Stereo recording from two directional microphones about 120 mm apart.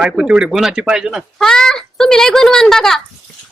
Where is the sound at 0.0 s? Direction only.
5° right (ahead or behind).